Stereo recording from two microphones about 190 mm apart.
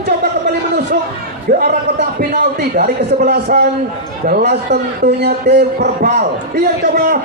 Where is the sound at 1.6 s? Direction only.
60° right (ahead or behind).